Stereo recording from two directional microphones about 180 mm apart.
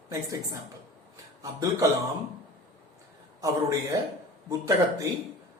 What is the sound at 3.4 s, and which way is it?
A man's voice, 20° right (ahead or behind).